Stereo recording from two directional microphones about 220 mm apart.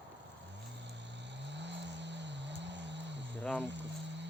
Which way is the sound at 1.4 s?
55° right (ahead or behind).